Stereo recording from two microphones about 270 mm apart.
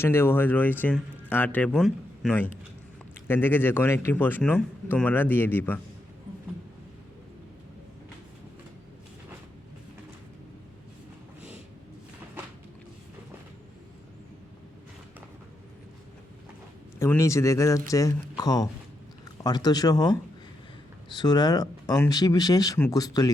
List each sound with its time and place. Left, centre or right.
0.0 s speech: centre
17.0 s speech: centre